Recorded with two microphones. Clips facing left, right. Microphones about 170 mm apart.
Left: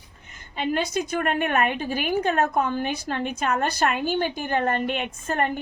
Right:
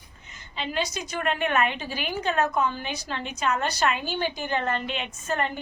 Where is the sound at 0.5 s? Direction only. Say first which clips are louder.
Left 5 dB; 50° left (ahead or behind).